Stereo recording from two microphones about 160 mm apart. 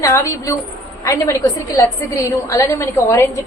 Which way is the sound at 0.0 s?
20° left (ahead or behind).